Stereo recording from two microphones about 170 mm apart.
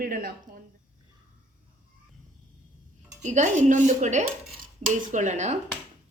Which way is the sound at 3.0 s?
45° right (ahead or behind).